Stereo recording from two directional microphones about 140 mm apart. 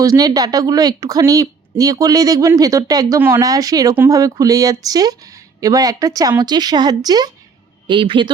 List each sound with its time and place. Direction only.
0.0 s a woman's voice: 25° right (ahead or behind)